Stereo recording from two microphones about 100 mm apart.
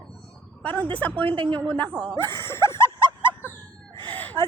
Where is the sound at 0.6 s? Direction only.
15° left (ahead or behind).